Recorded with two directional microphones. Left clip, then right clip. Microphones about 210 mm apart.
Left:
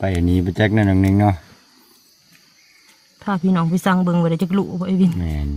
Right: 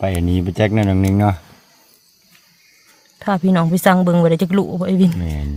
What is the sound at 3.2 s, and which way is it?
Speech, 45° right (ahead or behind).